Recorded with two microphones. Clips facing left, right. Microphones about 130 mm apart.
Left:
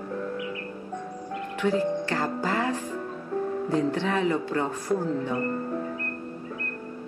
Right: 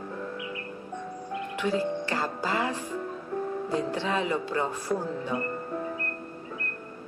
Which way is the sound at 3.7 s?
15° right (ahead or behind).